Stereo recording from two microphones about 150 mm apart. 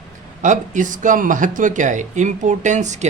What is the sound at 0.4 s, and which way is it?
Speech, 55° right (ahead or behind).